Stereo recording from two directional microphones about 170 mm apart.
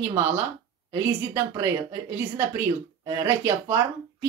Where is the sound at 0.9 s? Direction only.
15° right (ahead or behind).